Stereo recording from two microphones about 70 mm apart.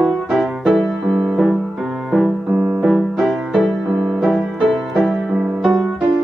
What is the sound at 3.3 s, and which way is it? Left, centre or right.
Music, centre.